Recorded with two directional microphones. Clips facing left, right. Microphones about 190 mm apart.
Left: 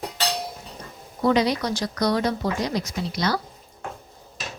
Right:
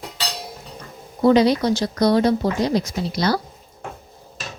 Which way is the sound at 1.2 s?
30° right (ahead or behind).